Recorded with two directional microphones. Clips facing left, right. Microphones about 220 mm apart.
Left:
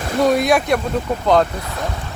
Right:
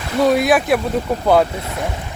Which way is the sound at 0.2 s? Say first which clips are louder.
Right 1 dB; centre (ahead or behind).